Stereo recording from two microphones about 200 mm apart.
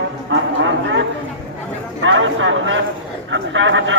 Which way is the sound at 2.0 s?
70° right (ahead or behind).